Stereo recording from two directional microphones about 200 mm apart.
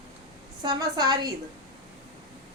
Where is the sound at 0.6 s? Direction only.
20° right (ahead or behind).